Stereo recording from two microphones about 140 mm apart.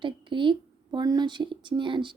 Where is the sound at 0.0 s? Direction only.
35° right (ahead or behind).